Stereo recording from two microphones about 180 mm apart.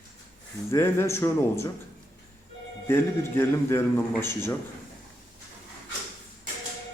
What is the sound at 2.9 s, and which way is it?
A man's voice, 15° left (ahead or behind).